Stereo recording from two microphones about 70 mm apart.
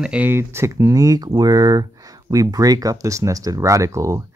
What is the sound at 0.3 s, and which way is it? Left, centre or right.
Speech, right.